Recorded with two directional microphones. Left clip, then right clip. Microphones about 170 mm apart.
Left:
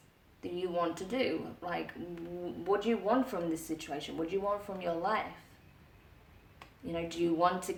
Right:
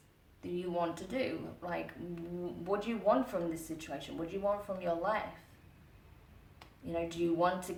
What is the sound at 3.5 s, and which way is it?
Speech, 30° left (ahead or behind).